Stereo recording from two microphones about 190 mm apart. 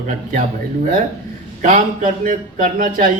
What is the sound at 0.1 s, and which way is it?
Speech, 40° right (ahead or behind).